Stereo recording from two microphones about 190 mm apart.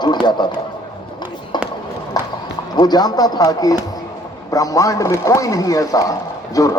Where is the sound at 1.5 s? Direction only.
25° left (ahead or behind).